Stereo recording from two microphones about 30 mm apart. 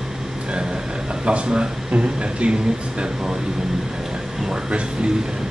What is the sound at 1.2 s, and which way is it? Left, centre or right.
Speech, right.